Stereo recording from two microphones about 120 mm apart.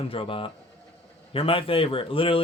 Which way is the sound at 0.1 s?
50° left (ahead or behind).